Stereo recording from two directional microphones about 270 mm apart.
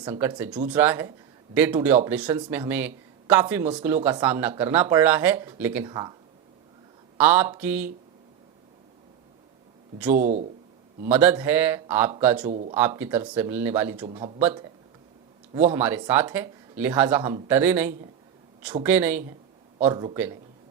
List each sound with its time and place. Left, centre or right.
0.0 s speech: centre
7.2 s speech: centre
10.1 s speech: right
11.1 s speech: centre
12.5 s speech: right
13.0 s speech: centre
14.0 s speech: centre
15.6 s speech: centre